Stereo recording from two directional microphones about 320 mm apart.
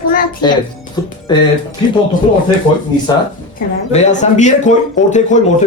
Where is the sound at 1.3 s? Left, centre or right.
Centre.